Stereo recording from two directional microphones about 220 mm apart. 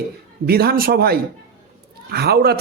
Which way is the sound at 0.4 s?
45° right (ahead or behind).